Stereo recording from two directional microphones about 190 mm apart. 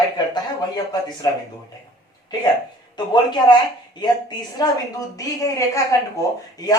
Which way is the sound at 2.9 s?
20° left (ahead or behind).